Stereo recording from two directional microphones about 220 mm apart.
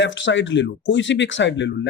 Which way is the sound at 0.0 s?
55° left (ahead or behind).